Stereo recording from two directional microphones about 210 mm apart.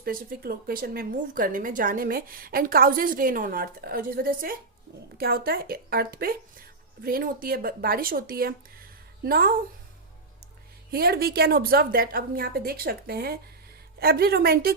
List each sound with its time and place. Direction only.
0.0 s speech: 45° right (ahead or behind)
10.9 s speech: 45° right (ahead or behind)